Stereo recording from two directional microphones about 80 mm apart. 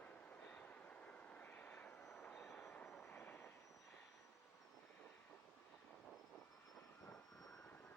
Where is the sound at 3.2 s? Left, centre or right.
Left.